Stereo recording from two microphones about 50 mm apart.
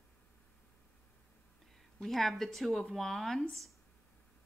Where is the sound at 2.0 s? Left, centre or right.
Centre.